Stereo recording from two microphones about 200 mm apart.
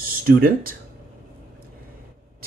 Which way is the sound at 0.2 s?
45° right (ahead or behind).